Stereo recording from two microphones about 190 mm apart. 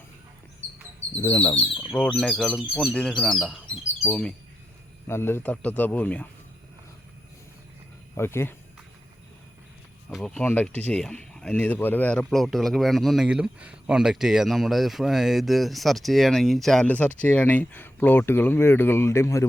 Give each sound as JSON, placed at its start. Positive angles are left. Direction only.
{"t": 1.2, "sound": "speech", "side_deg": 25}
{"t": 1.9, "sound": "speech", "side_deg": 5}
{"t": 8.1, "sound": "speech", "side_deg": 15}
{"t": 10.1, "sound": "speech", "side_deg": 0}